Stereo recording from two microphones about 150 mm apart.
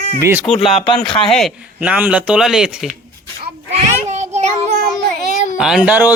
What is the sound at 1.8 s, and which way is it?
A man's voice, 10° right (ahead or behind).